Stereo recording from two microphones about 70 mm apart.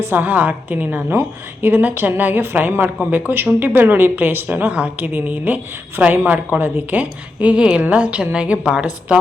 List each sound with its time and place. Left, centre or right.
0.0 s a woman's voice: right